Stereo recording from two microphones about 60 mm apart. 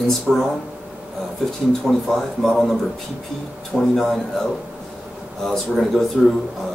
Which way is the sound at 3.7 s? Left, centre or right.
Centre.